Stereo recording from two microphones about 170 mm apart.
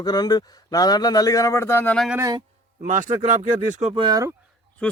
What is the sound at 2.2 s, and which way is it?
Speech, 20° right (ahead or behind).